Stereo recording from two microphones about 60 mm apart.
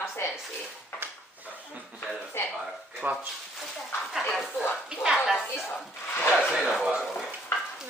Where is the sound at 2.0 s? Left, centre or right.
Left.